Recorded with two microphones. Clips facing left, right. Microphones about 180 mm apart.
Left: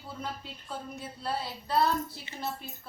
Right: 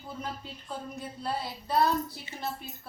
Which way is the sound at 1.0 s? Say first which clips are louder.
Even; centre (ahead or behind).